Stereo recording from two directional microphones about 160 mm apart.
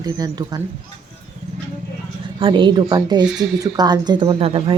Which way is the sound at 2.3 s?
30° right (ahead or behind).